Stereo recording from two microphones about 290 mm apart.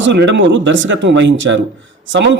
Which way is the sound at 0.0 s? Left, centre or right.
Right.